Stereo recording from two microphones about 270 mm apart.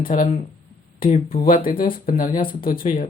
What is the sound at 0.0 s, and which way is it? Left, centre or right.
Speech, left.